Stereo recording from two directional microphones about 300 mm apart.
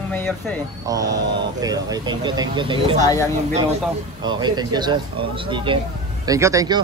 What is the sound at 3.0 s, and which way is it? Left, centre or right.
Speech, centre.